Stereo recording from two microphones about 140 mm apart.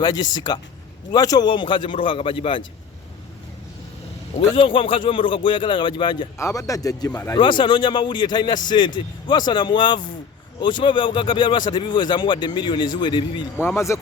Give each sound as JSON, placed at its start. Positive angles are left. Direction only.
{"t": 0.0, "sound": "speech", "side_deg": 30}
{"t": 4.4, "sound": "speech", "side_deg": 40}
{"t": 6.4, "sound": "speech", "side_deg": 25}
{"t": 7.3, "sound": "speech", "side_deg": 35}
{"t": 13.6, "sound": "speech", "side_deg": 20}